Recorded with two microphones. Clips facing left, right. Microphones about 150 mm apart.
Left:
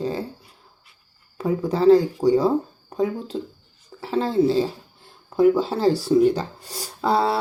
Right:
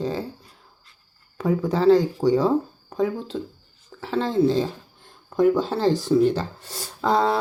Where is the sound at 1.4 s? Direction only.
35° left (ahead or behind).